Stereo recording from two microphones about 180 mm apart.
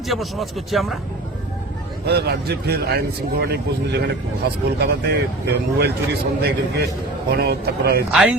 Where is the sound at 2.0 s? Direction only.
65° right (ahead or behind).